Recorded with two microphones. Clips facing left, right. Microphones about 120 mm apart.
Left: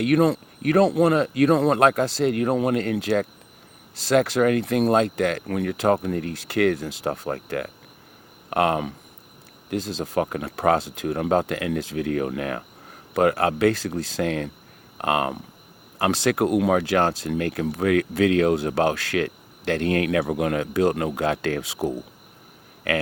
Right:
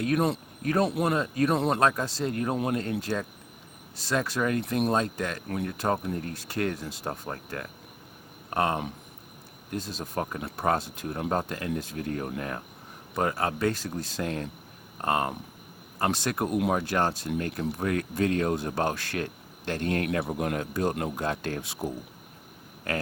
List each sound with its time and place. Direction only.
0.0 s speech: 90° left